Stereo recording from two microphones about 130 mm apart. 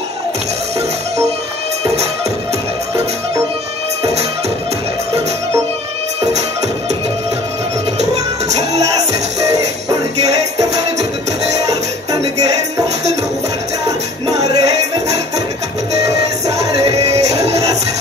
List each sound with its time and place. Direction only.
8.0 s music: 60° right (ahead or behind)
13.8 s music: 30° right (ahead or behind)
16.1 s music: 25° right (ahead or behind)